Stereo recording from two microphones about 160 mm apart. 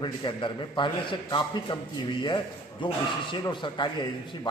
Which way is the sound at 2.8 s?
30° left (ahead or behind).